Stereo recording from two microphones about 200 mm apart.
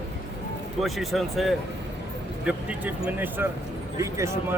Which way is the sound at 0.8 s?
Centre (ahead or behind).